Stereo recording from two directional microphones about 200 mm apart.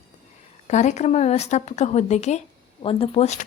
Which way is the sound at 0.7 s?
35° left (ahead or behind).